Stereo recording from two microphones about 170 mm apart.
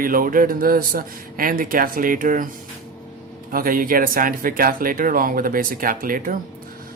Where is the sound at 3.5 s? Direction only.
55° right (ahead or behind).